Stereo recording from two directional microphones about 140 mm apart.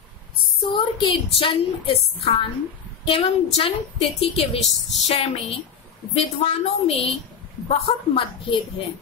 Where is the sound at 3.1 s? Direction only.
40° left (ahead or behind).